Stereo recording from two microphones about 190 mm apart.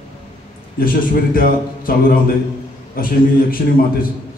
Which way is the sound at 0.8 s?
50° left (ahead or behind).